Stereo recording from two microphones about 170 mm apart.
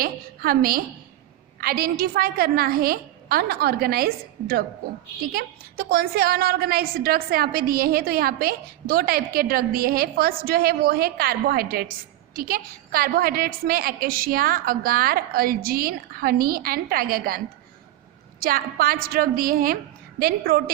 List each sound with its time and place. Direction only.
0.0 s a woman's voice: 60° right (ahead or behind)